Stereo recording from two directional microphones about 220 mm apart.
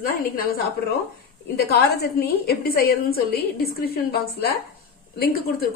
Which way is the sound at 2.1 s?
45° left (ahead or behind).